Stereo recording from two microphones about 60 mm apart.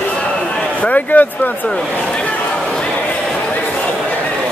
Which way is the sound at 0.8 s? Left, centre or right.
Left.